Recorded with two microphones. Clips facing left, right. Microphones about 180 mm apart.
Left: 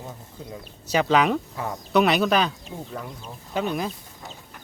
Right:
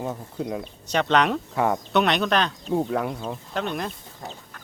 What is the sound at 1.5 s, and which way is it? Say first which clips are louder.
Speech: right 9 dB; 75° right (ahead or behind).